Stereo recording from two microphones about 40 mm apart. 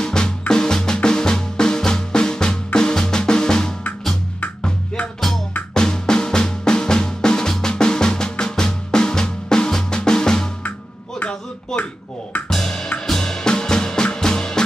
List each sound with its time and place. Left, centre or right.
0.0 s music: centre
5.8 s music: centre
8.9 s drum: centre
11.7 s a sound: centre
12.4 s drum kit: centre
13.0 s music: centre